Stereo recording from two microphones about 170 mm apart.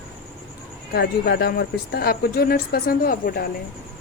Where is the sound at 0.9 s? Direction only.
70° left (ahead or behind).